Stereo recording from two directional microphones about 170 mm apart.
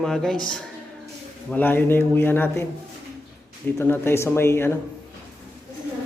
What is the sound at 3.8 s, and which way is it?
Speech, 15° left (ahead or behind).